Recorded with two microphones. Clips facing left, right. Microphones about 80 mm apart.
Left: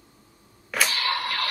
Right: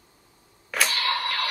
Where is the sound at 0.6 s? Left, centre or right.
Centre.